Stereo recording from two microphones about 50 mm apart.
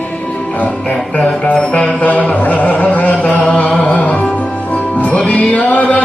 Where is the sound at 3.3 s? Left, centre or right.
Centre.